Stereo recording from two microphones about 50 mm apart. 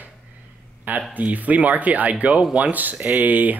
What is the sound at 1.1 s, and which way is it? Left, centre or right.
Speech, right.